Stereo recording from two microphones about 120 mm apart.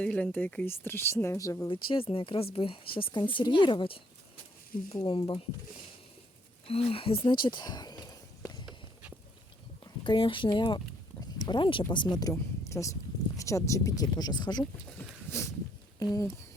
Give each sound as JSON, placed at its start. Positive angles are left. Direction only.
{"t": 0.0, "sound": "speech", "side_deg": 10}
{"t": 1.7, "sound": "speech", "side_deg": 45}
{"t": 5.0, "sound": "speech", "side_deg": 45}
{"t": 6.7, "sound": "speech", "side_deg": 55}
{"t": 7.3, "sound": "speech", "side_deg": 40}
{"t": 8.6, "sound": "walk", "side_deg": -10}
{"t": 9.8, "sound": "speech", "side_deg": 40}
{"t": 12.3, "sound": "speech", "side_deg": 25}
{"t": 14.9, "sound": "a sound", "side_deg": 25}